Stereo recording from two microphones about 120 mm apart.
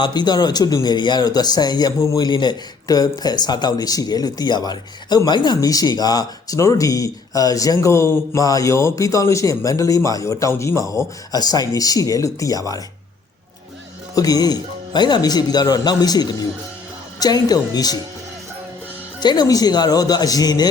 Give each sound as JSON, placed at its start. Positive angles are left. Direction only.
{"t": 0.0, "sound": "speech", "side_deg": 35}
{"t": 2.0, "sound": "speech", "side_deg": 25}
{"t": 2.2, "sound": "speech", "side_deg": 35}
{"t": 14.2, "sound": "speech", "side_deg": 30}
{"t": 19.2, "sound": "speech", "side_deg": 35}